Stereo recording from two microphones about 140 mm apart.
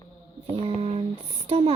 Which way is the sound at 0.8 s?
45° right (ahead or behind).